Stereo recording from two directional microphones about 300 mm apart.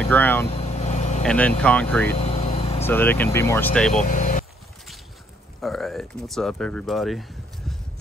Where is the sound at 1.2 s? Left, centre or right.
Centre.